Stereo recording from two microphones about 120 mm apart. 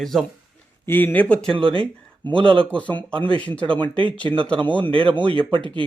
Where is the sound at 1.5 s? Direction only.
45° right (ahead or behind).